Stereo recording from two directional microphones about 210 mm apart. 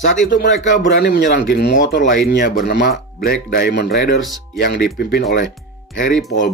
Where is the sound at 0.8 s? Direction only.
55° left (ahead or behind).